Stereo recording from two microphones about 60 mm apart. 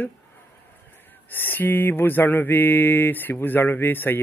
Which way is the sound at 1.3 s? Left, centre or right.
Left.